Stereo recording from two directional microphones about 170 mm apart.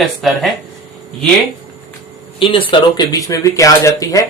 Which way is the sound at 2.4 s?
30° left (ahead or behind).